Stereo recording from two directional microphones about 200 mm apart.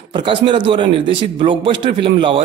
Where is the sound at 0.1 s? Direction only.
25° right (ahead or behind).